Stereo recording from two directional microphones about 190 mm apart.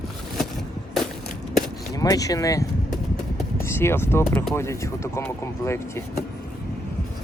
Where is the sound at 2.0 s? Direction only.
20° left (ahead or behind).